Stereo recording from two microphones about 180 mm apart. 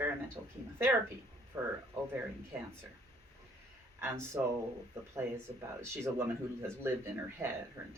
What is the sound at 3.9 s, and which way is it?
Speech, 15° right (ahead or behind).